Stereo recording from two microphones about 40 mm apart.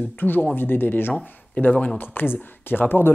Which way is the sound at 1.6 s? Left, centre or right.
Left.